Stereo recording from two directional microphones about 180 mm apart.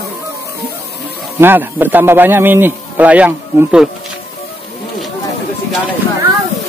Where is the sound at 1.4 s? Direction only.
10° right (ahead or behind).